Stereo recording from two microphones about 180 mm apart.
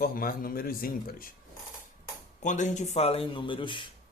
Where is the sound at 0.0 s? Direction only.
55° left (ahead or behind).